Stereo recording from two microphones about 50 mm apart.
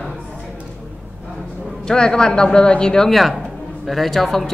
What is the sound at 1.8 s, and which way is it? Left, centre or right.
A man's voice, centre.